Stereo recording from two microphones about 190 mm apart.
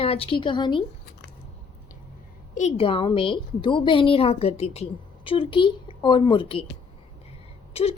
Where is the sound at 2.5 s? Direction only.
35° left (ahead or behind).